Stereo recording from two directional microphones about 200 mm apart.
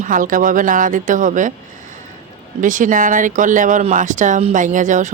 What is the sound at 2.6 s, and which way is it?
Speech, 40° right (ahead or behind).